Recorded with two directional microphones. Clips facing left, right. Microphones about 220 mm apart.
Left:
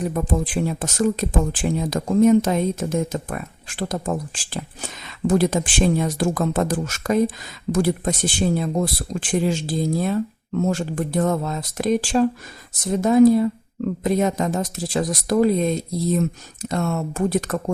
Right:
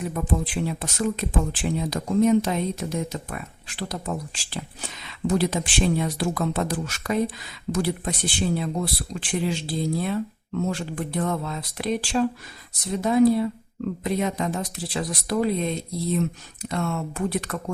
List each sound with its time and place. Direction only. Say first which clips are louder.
0.1 s speech: left 3 dB; 40° left (ahead or behind)